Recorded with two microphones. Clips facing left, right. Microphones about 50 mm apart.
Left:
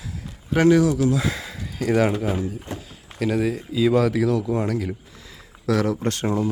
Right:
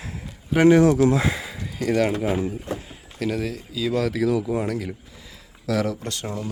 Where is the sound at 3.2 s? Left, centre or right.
Centre.